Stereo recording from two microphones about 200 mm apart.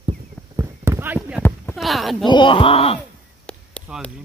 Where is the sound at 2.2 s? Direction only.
25° left (ahead or behind).